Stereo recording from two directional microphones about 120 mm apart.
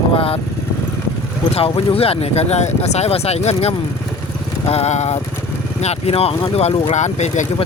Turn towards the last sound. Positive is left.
turn(degrees=75)  # may be behind; listen again after turning